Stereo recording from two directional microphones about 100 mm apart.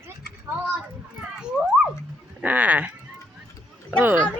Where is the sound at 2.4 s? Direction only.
15° right (ahead or behind).